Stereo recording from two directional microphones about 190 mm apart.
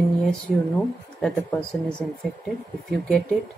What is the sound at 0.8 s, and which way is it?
A woman's voice, 5° left (ahead or behind).